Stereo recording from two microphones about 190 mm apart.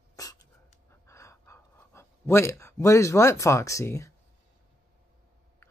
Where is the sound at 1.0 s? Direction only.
15° left (ahead or behind).